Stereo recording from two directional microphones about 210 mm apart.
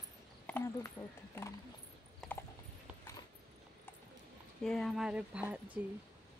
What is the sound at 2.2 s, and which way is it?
Clip-clop, centre (ahead or behind).